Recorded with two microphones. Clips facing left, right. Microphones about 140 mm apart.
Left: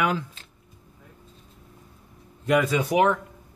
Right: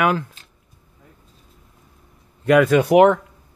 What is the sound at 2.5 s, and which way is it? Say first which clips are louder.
Speech: right 8 dB; 65° right (ahead or behind).